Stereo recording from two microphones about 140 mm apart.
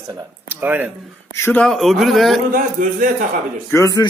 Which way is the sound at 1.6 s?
Centre (ahead or behind).